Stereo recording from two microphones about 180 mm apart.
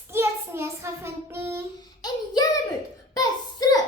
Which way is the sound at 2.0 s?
20° left (ahead or behind).